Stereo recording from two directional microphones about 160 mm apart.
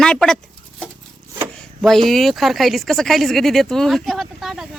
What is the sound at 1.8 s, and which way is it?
Speech, centre (ahead or behind).